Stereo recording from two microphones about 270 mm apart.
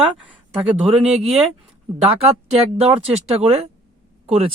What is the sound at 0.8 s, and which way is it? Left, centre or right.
Speech, right.